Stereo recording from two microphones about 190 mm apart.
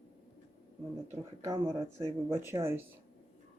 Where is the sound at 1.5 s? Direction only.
20° right (ahead or behind).